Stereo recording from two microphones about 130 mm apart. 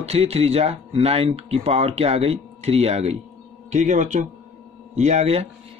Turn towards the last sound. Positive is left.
turn(degrees=-55)  # may be behind; listen again after turning